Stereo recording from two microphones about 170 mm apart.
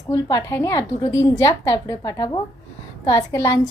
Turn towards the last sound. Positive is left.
turn(degrees=20)  # may be behind; listen again after turning